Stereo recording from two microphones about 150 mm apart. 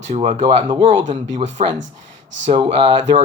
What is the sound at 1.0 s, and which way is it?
Speech, 55° right (ahead or behind).